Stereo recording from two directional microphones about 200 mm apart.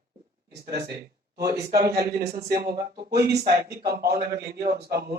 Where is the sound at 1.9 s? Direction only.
50° right (ahead or behind).